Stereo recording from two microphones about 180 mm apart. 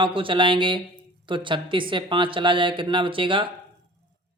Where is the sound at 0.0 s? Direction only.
30° right (ahead or behind).